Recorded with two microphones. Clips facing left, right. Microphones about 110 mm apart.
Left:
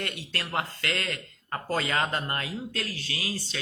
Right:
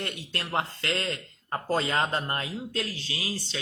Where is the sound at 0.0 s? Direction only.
25° right (ahead or behind).